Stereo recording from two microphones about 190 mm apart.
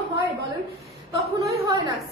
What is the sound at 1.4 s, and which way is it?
Speech, 15° right (ahead or behind).